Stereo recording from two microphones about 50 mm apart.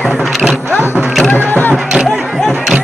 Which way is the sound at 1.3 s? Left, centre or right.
Left.